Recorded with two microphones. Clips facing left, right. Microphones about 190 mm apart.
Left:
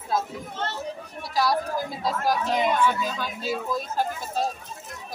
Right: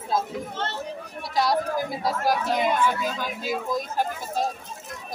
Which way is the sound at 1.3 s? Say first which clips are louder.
Right 1 dB; 20° right (ahead or behind).